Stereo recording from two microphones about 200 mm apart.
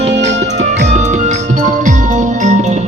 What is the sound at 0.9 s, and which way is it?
Music, 35° right (ahead or behind).